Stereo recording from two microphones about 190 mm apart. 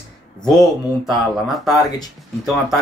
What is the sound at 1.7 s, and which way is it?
Speech, 20° left (ahead or behind).